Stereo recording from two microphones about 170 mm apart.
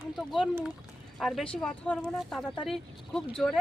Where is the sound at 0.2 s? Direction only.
Centre (ahead or behind).